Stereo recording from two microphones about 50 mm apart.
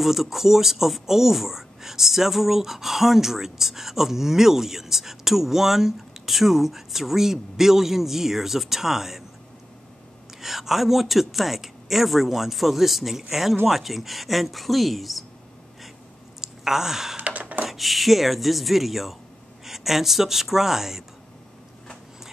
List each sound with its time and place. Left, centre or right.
0.0 s speech: centre
10.4 s a man's voice: centre
16.3 s sigh: centre
17.2 s a sound: right
17.6 s a man's voice: centre